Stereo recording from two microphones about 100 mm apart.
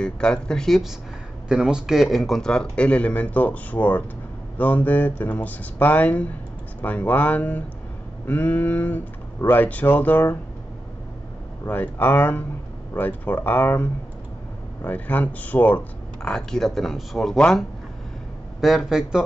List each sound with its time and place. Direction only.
0.0 s speech: 10° left (ahead or behind)
11.6 s speech: 15° left (ahead or behind); by 19.2 s 5° right (ahead or behind)